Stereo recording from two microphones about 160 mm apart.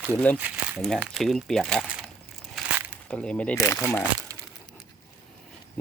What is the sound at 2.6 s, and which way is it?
Crumpling, centre (ahead or behind).